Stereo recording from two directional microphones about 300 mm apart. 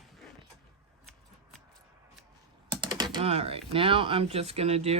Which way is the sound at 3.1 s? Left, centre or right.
Centre.